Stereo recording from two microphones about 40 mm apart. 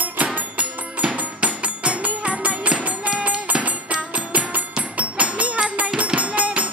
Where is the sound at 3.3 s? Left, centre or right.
Right.